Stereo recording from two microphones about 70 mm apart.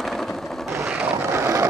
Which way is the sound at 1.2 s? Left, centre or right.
Right.